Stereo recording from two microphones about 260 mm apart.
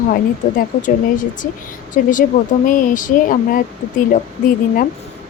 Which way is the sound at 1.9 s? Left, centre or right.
Left.